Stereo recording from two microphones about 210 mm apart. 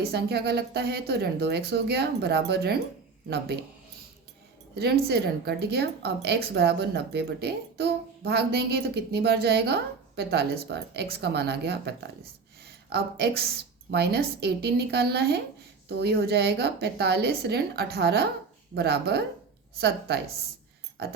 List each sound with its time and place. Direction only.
0.0 s speech: 50° right (ahead or behind)
4.7 s speech: 50° right (ahead or behind)
21.0 s speech: 50° right (ahead or behind)